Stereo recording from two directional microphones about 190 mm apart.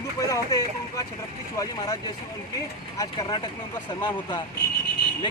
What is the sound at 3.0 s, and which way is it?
Speech, 20° left (ahead or behind).